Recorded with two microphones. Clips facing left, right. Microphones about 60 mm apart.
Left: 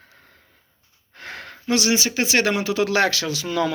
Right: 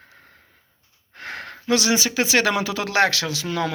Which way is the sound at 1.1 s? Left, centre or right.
Right.